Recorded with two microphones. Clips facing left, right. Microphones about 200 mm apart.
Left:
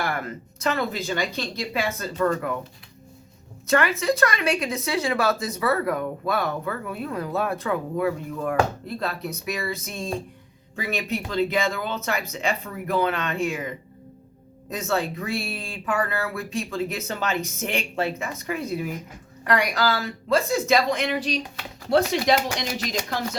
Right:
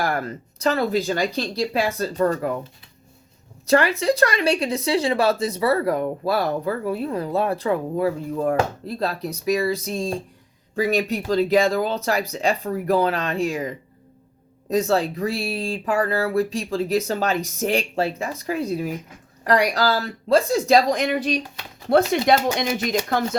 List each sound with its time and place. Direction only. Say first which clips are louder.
0.0 s speech: right 4 dB; 35° right (ahead or behind)
3.7 s speech: right 3 dB; 35° right (ahead or behind); by 23.4 s 50° right (ahead or behind)